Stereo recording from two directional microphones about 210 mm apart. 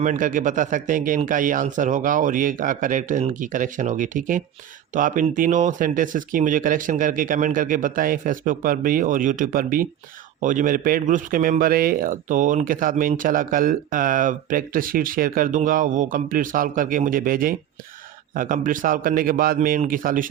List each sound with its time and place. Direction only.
0.0 s a man's voice: 40° right (ahead or behind)